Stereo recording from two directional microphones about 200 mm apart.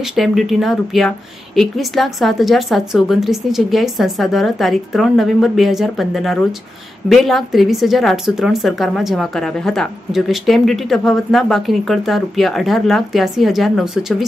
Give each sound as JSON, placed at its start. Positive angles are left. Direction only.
{"t": 0.0, "sound": "a woman's voice", "side_deg": 0}